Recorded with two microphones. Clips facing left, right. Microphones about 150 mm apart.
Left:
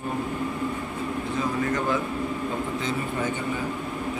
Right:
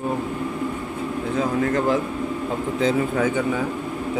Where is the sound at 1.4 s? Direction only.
75° right (ahead or behind).